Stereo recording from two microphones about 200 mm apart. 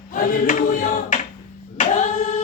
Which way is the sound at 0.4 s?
40° left (ahead or behind).